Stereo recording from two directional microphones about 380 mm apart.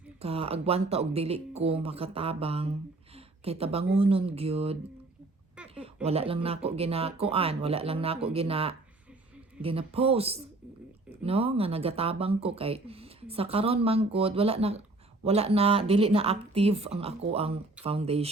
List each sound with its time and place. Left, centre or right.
0.2 s speech: centre
3.2 s a sound: centre
3.9 s speech: centre